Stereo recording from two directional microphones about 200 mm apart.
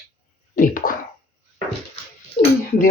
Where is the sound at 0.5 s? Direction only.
45° left (ahead or behind).